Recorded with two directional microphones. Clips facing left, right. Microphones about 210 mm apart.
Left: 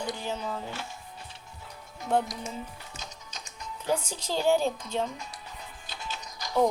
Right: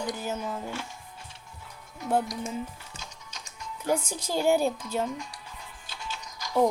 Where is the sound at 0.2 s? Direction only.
10° right (ahead or behind).